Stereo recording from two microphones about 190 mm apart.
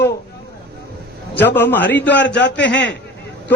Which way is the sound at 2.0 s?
70° left (ahead or behind).